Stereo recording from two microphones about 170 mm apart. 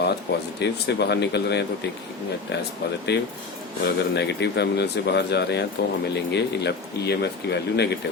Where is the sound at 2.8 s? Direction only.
75° left (ahead or behind).